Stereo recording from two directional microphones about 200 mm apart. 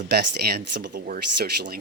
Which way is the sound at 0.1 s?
50° right (ahead or behind).